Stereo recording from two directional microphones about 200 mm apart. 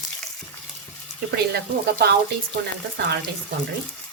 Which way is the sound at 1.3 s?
55° right (ahead or behind).